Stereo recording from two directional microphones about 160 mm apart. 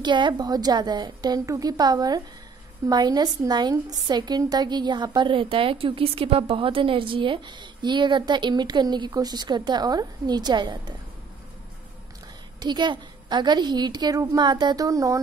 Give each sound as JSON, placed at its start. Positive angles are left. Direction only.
{"t": 0.0, "sound": "a woman's voice", "side_deg": -30}
{"t": 12.5, "sound": "a woman's voice", "side_deg": -30}